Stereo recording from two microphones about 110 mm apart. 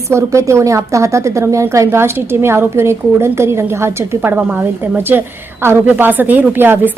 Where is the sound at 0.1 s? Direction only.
25° right (ahead or behind).